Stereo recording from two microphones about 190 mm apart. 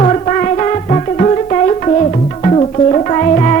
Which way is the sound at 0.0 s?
35° left (ahead or behind).